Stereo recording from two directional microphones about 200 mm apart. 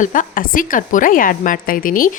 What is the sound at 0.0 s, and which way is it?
A woman's voice, 40° left (ahead or behind).